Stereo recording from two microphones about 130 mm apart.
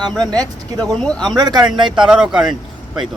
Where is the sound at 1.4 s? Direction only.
35° right (ahead or behind).